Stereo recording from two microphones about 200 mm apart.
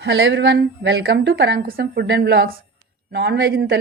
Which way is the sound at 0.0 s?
65° right (ahead or behind).